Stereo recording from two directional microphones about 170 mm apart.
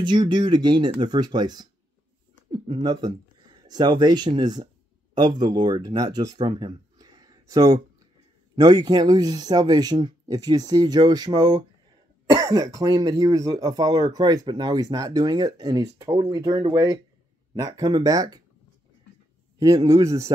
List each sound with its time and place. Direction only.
0.0 s speech: 25° right (ahead or behind)
19.6 s speech: 20° right (ahead or behind)